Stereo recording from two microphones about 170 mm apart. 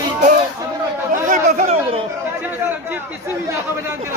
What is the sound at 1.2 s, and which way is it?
Chatter, 45° right (ahead or behind).